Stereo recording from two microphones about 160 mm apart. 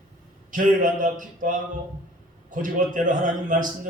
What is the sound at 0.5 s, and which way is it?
A man's voice, 55° right (ahead or behind).